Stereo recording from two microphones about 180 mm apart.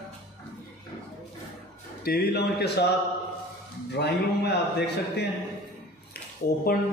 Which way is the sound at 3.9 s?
70° left (ahead or behind).